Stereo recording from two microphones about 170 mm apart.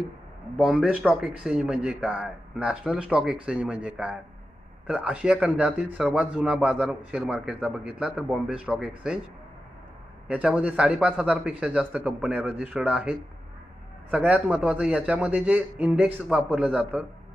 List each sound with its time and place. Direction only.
0.6 s a man's voice: 5° right (ahead or behind)
10.2 s a man's voice: 5° right (ahead or behind)
14.1 s a man's voice: 10° right (ahead or behind)